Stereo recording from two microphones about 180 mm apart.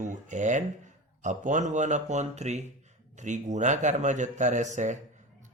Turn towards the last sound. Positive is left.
turn(degrees=-40)  # may be behind; listen again after turning